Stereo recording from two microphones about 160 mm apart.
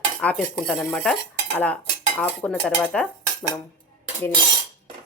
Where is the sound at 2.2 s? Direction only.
5° left (ahead or behind).